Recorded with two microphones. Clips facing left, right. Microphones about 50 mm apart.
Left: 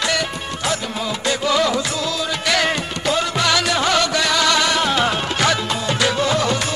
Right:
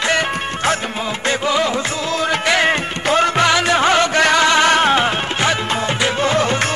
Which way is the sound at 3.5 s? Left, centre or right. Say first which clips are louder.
Right 4 dB; right.